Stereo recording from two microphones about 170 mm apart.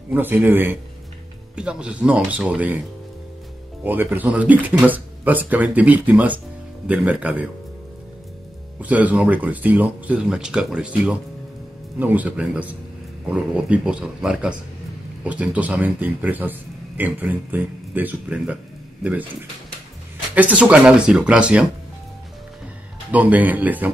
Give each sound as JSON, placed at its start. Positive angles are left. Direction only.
{"t": 0.1, "sound": "speech", "side_deg": -10}
{"t": 3.8, "sound": "speech", "side_deg": -10}
{"t": 8.7, "sound": "speech", "side_deg": -10}
{"t": 20.3, "sound": "speech", "side_deg": -10}
{"t": 23.1, "sound": "speech", "side_deg": -10}